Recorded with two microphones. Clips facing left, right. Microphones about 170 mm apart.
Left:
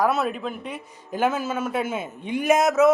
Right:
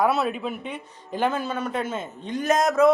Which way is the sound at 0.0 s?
Centre (ahead or behind).